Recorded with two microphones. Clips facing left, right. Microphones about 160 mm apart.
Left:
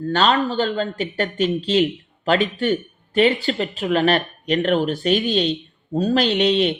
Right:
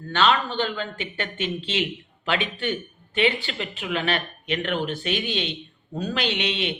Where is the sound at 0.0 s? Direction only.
40° left (ahead or behind).